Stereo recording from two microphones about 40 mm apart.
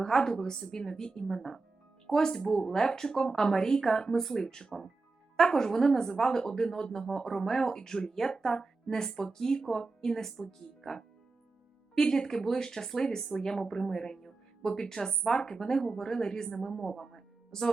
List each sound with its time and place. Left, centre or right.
0.0 s speech: centre
1.4 s speech: centre